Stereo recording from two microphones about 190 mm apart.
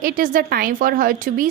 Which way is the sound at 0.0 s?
45° right (ahead or behind).